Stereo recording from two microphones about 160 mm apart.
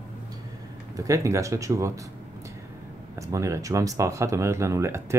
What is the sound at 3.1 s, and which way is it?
Speech, 20° right (ahead or behind).